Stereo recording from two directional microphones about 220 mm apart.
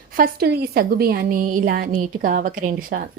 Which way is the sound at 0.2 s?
45° right (ahead or behind).